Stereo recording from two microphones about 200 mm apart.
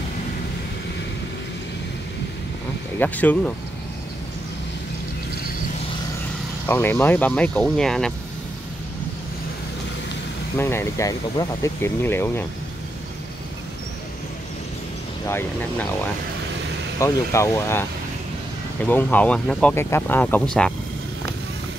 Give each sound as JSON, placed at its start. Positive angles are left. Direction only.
{"t": 3.0, "sound": "speech", "side_deg": 10}
{"t": 6.7, "sound": "speech", "side_deg": 10}
{"t": 10.6, "sound": "speech", "side_deg": 10}
{"t": 15.2, "sound": "speech", "side_deg": 10}
{"t": 17.0, "sound": "speech", "side_deg": 15}
{"t": 18.9, "sound": "speech", "side_deg": 10}